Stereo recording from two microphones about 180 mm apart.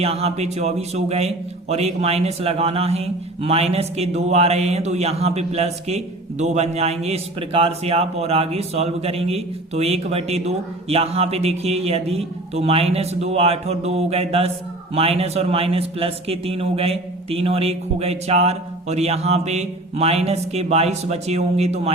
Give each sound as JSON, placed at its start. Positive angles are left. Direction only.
{"t": 0.0, "sound": "a man's voice", "side_deg": -35}